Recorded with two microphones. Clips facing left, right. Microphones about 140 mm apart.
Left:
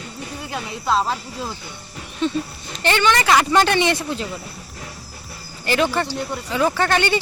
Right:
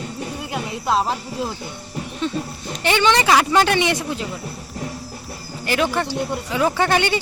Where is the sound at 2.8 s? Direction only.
20° right (ahead or behind).